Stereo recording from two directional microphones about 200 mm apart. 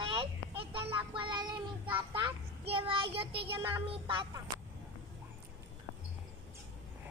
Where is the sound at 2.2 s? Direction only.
25° right (ahead or behind).